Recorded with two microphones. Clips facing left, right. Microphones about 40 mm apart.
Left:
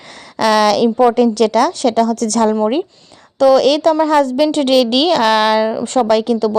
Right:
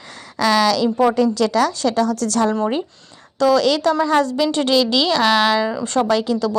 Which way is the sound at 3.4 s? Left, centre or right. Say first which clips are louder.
Left 5 dB; left.